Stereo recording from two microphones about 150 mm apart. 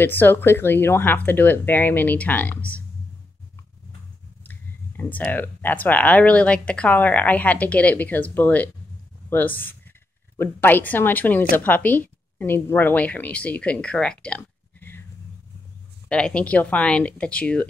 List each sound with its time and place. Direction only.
0.0 s speech: 15° left (ahead or behind)
4.5 s speech: 10° left (ahead or behind)
16.1 s speech: 5° left (ahead or behind)